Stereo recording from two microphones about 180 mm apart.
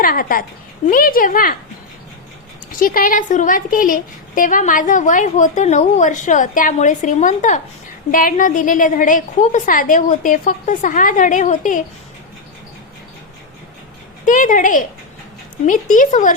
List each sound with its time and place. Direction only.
0.0 s a woman's voice: 55° left (ahead or behind)
2.7 s a woman's voice: 50° left (ahead or behind)
14.3 s a woman's voice: 45° left (ahead or behind)